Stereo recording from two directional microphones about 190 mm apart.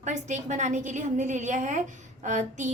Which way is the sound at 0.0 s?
40° right (ahead or behind).